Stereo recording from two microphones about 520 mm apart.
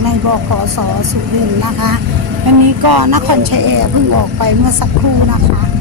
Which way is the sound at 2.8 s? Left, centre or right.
Right.